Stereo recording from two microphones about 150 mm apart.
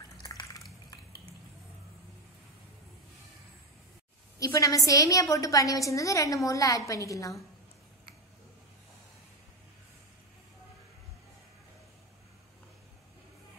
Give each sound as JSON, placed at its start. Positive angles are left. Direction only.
{"t": 0.2, "sound": "drip", "side_deg": 25}
{"t": 4.4, "sound": "a woman's voice", "side_deg": 20}